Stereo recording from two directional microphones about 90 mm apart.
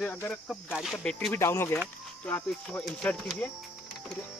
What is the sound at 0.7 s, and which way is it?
Speech, 5° right (ahead or behind).